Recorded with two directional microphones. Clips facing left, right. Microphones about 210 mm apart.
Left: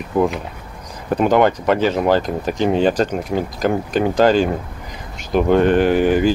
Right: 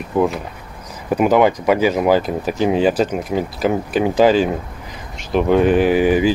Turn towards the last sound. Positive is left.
turn(degrees=-5)  # may be behind; listen again after turning